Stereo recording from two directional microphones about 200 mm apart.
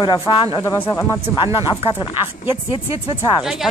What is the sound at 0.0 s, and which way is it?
Speech, 25° left (ahead or behind).